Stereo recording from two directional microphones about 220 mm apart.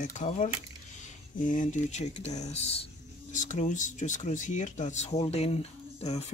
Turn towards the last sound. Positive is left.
turn(degrees=30)  # may be behind; listen again after turning